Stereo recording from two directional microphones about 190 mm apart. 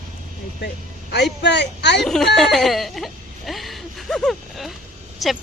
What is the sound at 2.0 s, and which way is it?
Speech, centre (ahead or behind).